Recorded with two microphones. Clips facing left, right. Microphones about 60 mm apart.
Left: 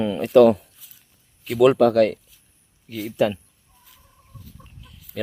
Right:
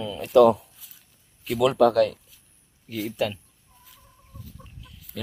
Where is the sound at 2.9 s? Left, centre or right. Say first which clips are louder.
Left 5 dB; centre.